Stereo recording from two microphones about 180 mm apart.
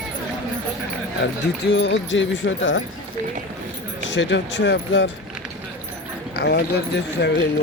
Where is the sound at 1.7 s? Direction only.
85° left.